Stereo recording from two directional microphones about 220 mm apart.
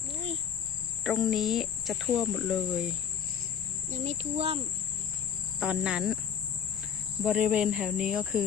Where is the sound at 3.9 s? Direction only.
30° right (ahead or behind).